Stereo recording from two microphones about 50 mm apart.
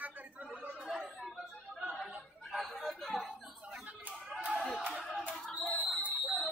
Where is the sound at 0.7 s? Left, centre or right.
Right.